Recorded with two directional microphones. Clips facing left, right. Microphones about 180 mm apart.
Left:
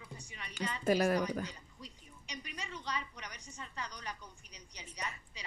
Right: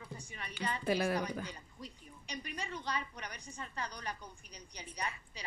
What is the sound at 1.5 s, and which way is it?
A woman's voice, 55° right (ahead or behind).